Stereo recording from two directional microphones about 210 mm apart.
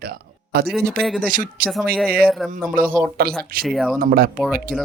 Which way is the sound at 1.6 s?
45° right (ahead or behind).